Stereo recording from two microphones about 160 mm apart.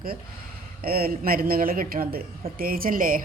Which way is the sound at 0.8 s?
70° right (ahead or behind).